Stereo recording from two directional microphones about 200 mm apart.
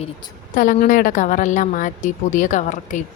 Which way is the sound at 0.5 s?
40° left (ahead or behind).